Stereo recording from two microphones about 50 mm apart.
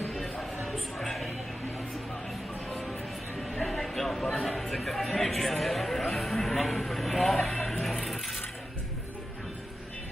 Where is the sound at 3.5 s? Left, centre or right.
Centre.